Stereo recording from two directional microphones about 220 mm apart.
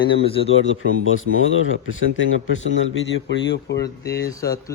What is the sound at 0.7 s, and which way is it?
A man's voice, 65° left (ahead or behind).